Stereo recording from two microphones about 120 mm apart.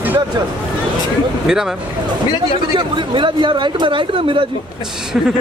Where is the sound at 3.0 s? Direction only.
45° right (ahead or behind).